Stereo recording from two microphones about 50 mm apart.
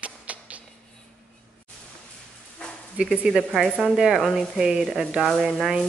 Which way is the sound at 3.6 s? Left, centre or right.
Centre.